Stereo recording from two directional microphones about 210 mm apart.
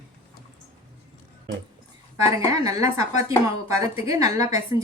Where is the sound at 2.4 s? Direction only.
15° right (ahead or behind).